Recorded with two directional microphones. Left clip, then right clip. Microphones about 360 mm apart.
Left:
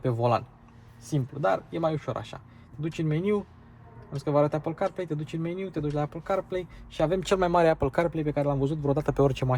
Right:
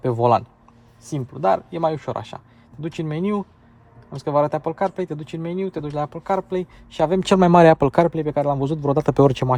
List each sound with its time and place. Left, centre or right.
0.0 s speech: centre
1.7 s speech: centre